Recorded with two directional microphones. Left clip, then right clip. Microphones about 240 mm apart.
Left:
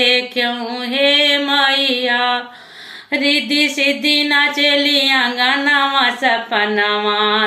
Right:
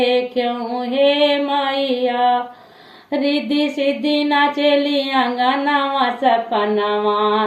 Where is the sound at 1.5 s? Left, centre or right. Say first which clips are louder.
Left 4 dB; centre.